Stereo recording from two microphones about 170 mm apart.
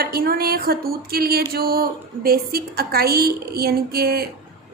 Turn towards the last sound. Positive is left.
turn(degrees=-65)  # may be behind; listen again after turning